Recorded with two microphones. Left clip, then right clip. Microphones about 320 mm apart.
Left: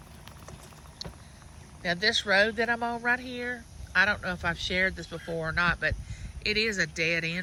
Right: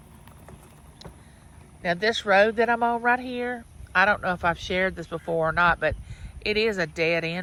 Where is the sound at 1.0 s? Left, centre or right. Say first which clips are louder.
Left 4 dB; centre.